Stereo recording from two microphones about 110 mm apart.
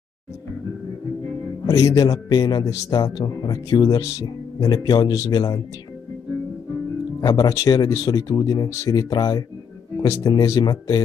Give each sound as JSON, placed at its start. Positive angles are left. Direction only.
{"t": 1.7, "sound": "a man's voice", "side_deg": 30}
{"t": 7.2, "sound": "a man's voice", "side_deg": 40}